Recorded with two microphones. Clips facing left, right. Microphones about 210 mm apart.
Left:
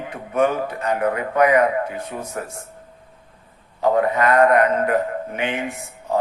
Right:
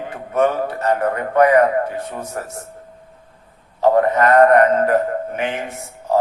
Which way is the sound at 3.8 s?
45° right (ahead or behind).